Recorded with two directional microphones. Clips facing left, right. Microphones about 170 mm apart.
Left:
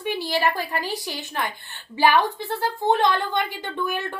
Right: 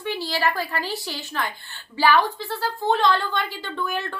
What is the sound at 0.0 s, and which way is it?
A woman's voice, 15° left (ahead or behind).